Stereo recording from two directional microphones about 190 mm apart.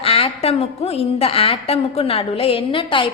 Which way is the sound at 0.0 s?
30° left (ahead or behind).